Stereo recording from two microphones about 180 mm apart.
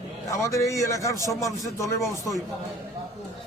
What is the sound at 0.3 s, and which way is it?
A man's voice, 15° left (ahead or behind).